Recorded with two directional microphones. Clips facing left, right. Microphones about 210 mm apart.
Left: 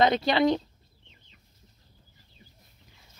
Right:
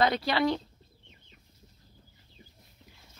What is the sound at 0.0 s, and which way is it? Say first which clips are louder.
Speech: left 4 dB; 20° left (ahead or behind).